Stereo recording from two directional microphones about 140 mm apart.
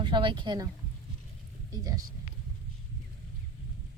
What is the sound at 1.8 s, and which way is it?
Speech, 25° right (ahead or behind).